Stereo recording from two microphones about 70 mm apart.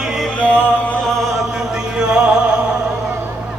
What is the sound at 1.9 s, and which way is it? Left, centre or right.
Music, centre.